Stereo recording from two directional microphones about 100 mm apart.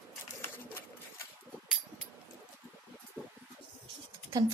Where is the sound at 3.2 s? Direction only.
15° right (ahead or behind).